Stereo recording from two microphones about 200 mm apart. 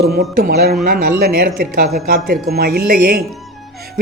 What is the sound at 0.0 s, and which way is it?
A man's voice, 50° right (ahead or behind).